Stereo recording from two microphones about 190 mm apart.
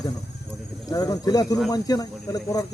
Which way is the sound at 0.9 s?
20° left (ahead or behind).